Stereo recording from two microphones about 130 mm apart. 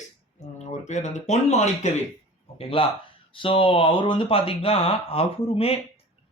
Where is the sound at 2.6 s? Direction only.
45° left (ahead or behind).